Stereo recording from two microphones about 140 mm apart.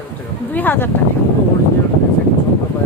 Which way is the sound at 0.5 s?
15° left (ahead or behind).